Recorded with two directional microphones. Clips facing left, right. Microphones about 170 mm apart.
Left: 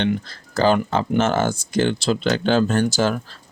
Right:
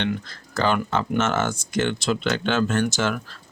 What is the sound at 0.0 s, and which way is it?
Speech, 35° left (ahead or behind).